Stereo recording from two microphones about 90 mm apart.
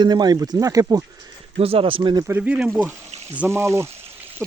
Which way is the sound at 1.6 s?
90° right.